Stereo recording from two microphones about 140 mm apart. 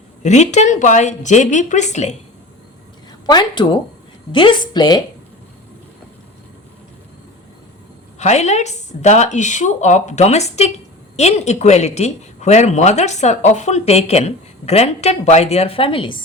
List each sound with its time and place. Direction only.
0.2 s speech: 55° left (ahead or behind)
3.2 s a woman's voice: 30° left (ahead or behind)
8.2 s speech: 55° left (ahead or behind); by 16.2 s 35° left (ahead or behind)